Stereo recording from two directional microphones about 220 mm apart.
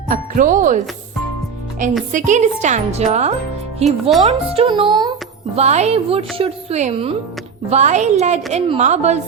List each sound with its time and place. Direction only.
0.1 s a woman's voice: 35° right (ahead or behind)
1.8 s a woman's voice: 35° right (ahead or behind); by 5.1 s 20° right (ahead or behind)
5.5 s a woman's voice: 30° right (ahead or behind)